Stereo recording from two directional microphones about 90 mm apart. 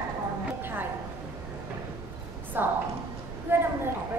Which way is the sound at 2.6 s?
25° right (ahead or behind).